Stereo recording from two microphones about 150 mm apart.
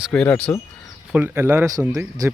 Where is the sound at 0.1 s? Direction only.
5° left (ahead or behind).